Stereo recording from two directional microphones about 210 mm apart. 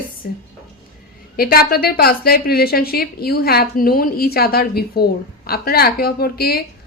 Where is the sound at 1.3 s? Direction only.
45° left (ahead or behind).